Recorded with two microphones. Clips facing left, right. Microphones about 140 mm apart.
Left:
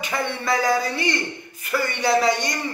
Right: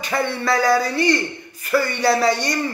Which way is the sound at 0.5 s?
20° left (ahead or behind).